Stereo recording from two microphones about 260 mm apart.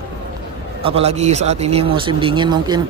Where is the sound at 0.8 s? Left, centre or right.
Right.